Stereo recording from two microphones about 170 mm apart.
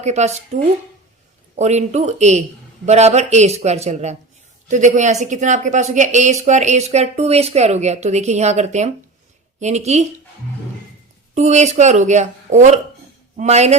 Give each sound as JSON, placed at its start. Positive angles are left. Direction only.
{"t": 0.0, "sound": "a man's voice", "side_deg": -40}
{"t": 11.3, "sound": "a man's voice", "side_deg": -45}